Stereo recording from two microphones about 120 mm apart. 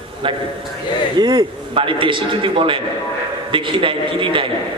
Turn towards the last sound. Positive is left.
turn(degrees=-45)  # may be behind; listen again after turning